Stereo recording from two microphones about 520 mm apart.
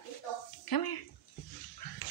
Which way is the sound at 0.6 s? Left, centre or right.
Left.